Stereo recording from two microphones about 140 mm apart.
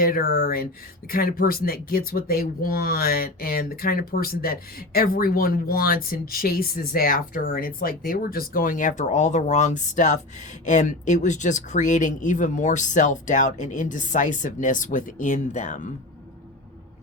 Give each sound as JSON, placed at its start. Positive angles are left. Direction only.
{"t": 0.0, "sound": "speech", "side_deg": 90}